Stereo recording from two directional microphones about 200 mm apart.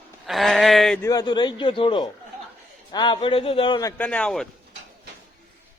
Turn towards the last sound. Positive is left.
turn(degrees=5)  # may be behind; listen again after turning